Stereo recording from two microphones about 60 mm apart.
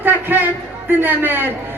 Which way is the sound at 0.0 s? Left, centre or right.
Right.